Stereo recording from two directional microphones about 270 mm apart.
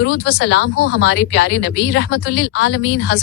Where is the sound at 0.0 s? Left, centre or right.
Left.